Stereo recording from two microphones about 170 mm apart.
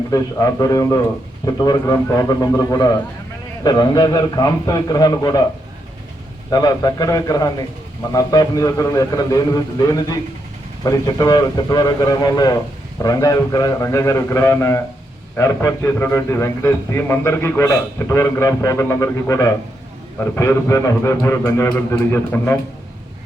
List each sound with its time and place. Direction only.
0.1 s a man's voice: 20° left (ahead or behind)
6.5 s a man's voice: 25° left (ahead or behind)